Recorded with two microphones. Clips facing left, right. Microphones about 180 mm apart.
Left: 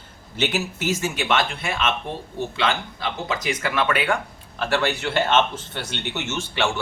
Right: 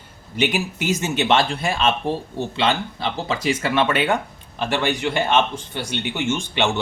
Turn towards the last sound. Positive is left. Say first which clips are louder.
# right 3 dB
turn(degrees=-20)  # may be behind; listen again after turning